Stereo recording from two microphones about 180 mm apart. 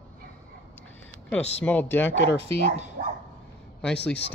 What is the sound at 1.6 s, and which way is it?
Speech, 10° left (ahead or behind).